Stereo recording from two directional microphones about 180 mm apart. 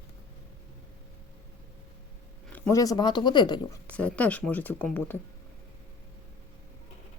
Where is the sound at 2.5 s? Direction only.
15° left (ahead or behind).